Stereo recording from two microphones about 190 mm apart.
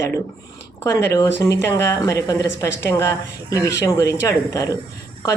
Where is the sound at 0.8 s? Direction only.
15° left (ahead or behind).